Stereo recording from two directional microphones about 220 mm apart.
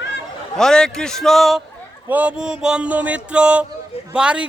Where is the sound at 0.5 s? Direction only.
Centre (ahead or behind).